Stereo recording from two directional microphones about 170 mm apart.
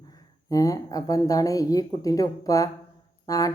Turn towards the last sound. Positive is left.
turn(degrees=20)  # may be behind; listen again after turning